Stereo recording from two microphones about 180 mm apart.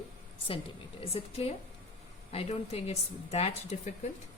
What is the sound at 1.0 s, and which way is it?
Speech, 35° left (ahead or behind).